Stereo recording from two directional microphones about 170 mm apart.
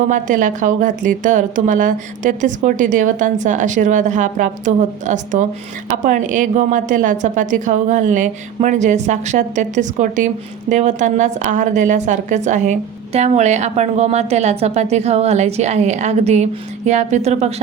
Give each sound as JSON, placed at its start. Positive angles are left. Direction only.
{"t": 0.1, "sound": "a woman's voice", "side_deg": -50}